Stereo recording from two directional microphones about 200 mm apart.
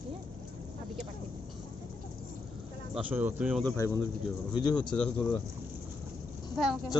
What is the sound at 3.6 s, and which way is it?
Speech, 5° left (ahead or behind).